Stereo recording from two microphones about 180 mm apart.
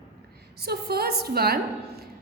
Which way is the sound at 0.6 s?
60° right (ahead or behind).